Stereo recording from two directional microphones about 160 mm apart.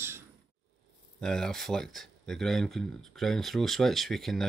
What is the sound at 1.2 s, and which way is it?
Speech, 5° left (ahead or behind).